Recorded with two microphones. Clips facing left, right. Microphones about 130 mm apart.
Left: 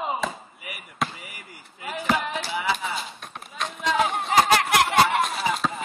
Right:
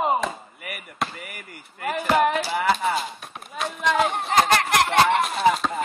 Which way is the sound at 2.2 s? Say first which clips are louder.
Right 8 dB; 60° right (ahead or behind).